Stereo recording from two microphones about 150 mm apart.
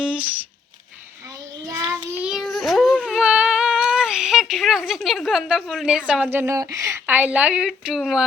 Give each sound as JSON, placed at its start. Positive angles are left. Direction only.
{"t": 0.0, "sound": "crumpling", "side_deg": -5}
{"t": 1.6, "sound": "child singing", "side_deg": -20}
{"t": 2.2, "sound": "a sound", "side_deg": -5}
{"t": 6.3, "sound": "speech", "side_deg": -15}